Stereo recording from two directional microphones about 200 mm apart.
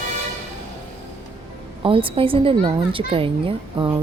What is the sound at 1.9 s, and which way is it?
Speech, 25° right (ahead or behind).